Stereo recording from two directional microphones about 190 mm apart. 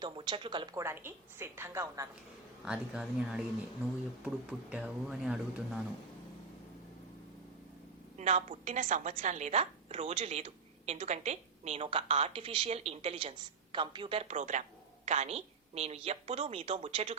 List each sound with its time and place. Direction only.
0.0 s a woman's voice: 25° right (ahead or behind); by 5.8 s 5° right (ahead or behind)
8.2 s a woman's voice: 35° right (ahead or behind)